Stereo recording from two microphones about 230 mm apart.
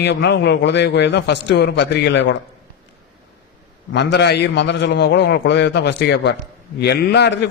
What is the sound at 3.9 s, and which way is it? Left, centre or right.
Speech, left.